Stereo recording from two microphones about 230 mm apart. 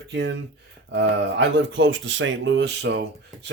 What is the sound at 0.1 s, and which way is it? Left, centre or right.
Speech, right.